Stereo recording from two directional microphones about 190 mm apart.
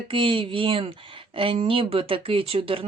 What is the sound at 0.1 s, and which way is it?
Speech, 25° right (ahead or behind).